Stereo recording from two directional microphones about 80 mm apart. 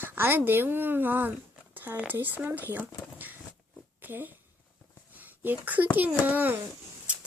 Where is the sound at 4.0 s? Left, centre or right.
Right.